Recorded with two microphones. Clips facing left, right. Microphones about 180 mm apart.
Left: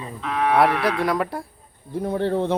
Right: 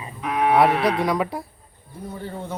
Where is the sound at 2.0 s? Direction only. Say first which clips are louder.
Left 10 dB; 75° left (ahead or behind).